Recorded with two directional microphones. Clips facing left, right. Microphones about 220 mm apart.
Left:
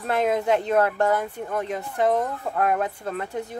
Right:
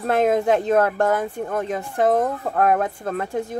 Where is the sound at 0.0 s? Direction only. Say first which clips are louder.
Right 4 dB; 45° right (ahead or behind).